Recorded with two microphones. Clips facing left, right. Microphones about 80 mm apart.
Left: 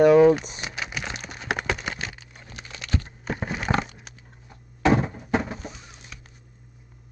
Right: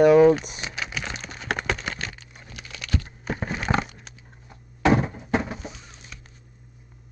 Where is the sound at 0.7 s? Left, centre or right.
Centre.